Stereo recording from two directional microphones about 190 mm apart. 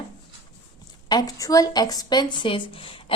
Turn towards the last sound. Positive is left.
turn(degrees=30)  # may be behind; listen again after turning